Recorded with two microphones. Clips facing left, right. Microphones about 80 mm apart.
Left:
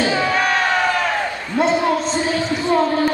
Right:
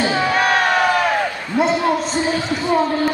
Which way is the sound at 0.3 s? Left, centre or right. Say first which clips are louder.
Right 2 dB; right.